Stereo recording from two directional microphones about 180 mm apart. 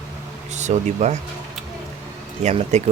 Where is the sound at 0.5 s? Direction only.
40° right (ahead or behind).